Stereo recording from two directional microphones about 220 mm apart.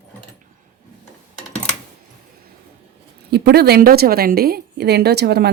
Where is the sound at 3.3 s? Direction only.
45° right (ahead or behind).